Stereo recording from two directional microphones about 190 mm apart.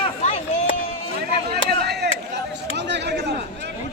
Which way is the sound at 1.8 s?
60° right (ahead or behind).